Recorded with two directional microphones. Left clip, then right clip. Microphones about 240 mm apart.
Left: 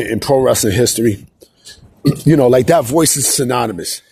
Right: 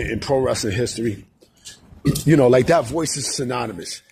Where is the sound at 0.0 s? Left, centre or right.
Left.